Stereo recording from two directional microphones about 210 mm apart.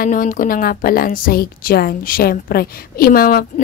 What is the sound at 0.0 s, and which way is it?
A woman's voice, 40° left (ahead or behind).